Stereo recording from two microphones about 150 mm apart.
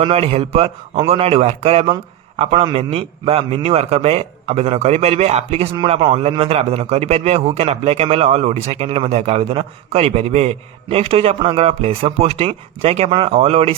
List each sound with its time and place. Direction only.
0.0 s a man's voice: 40° right (ahead or behind)